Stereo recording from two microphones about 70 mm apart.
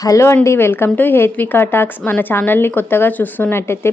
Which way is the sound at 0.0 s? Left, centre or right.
Left.